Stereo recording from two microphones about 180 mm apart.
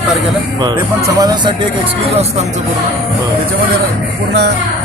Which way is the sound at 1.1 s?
20° right (ahead or behind).